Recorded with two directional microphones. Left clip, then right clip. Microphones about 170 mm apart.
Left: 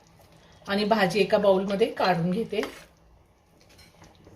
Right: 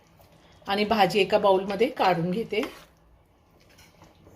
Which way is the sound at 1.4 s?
55° right (ahead or behind).